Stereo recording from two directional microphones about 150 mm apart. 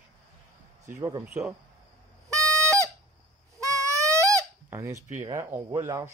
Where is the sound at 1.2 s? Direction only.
5° right (ahead or behind).